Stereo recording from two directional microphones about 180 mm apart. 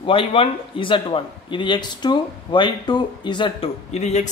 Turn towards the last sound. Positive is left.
turn(degrees=40)  # may be behind; listen again after turning